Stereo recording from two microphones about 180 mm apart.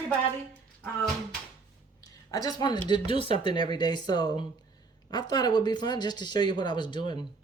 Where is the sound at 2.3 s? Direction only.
20° left (ahead or behind).